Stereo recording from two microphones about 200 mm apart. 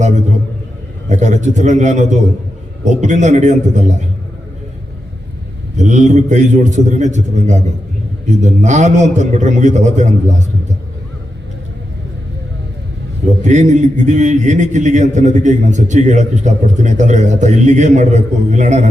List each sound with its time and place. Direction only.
1.1 s a man's voice: 35° right (ahead or behind)
5.7 s a man's voice: 35° right (ahead or behind)
13.4 s a man's voice: 35° right (ahead or behind)